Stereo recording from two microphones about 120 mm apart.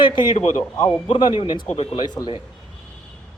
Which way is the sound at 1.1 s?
40° left (ahead or behind).